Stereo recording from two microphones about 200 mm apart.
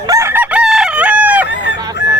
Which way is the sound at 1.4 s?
60° left (ahead or behind).